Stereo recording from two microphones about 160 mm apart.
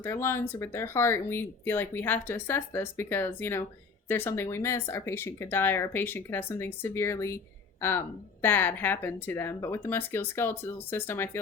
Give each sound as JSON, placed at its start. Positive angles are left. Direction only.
{"t": 0.0, "sound": "speech", "side_deg": 15}